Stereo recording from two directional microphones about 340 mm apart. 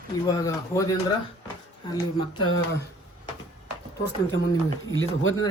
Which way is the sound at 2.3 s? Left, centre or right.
Left.